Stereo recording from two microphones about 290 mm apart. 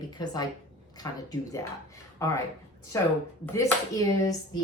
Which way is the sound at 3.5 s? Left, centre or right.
Centre.